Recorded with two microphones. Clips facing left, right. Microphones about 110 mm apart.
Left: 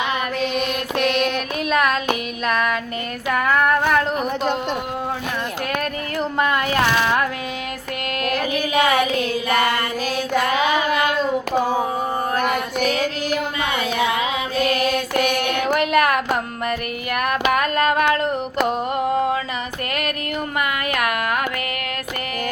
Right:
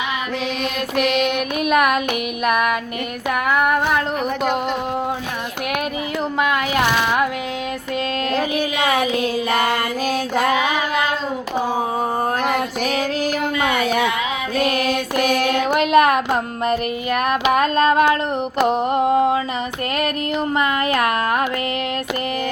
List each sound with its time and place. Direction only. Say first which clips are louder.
1.6 s child singing: right 2 dB; 15° right (ahead or behind)
8.3 s a sound: right 1 dB; 30° right (ahead or behind)
8.8 s child singing: left 1 dB; 30° right (ahead or behind)
15.1 s child singing: right 2 dB; 30° right (ahead or behind)
18.6 s mantra: right 4 dB; 20° right (ahead or behind)
20.6 s a sound: right 3 dB; 30° right (ahead or behind)